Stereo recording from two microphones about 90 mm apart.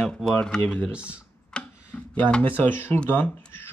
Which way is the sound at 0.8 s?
10° right (ahead or behind).